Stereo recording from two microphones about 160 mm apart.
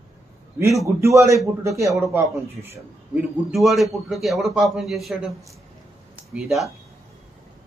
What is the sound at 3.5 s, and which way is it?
A man's voice, centre (ahead or behind).